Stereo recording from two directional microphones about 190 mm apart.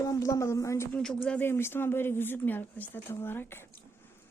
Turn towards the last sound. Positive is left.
turn(degrees=10)  # may be behind; listen again after turning